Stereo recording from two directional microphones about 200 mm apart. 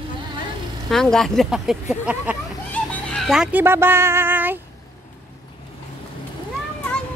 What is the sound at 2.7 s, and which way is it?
Speech, 5° left (ahead or behind).